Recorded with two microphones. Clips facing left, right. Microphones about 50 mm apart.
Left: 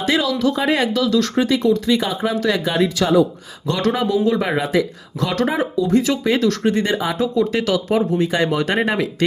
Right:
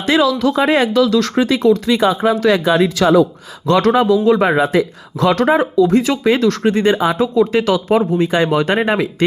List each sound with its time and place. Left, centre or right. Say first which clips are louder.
0.0 s speech: right 4 dB; right